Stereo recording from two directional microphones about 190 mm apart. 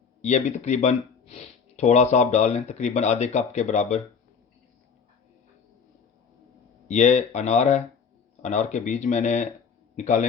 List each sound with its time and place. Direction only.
0.2 s speech: 35° left (ahead or behind)
6.8 s a man's voice: 35° left (ahead or behind)